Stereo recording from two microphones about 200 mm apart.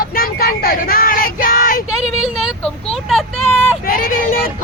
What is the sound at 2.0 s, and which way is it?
Speech, centre (ahead or behind).